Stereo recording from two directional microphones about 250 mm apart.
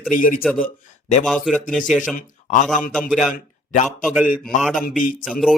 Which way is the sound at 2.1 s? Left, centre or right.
Left.